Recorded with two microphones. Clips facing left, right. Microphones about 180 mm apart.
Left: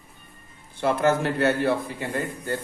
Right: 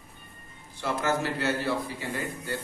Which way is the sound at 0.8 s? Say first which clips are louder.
Left 6 dB; 55° left (ahead or behind).